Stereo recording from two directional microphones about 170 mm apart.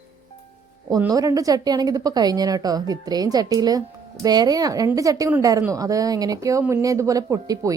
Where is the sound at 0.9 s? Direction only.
20° right (ahead or behind).